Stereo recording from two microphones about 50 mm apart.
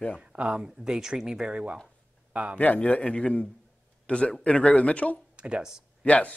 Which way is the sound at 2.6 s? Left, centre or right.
Left.